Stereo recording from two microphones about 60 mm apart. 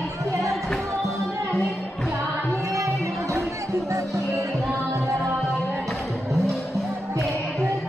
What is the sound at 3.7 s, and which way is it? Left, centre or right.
Music, right.